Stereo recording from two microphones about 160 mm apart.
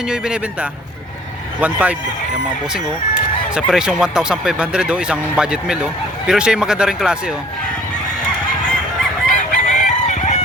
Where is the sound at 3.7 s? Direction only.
5° right (ahead or behind).